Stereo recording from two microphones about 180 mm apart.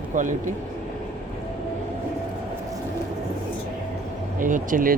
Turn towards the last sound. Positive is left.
turn(degrees=-50)  # may be behind; listen again after turning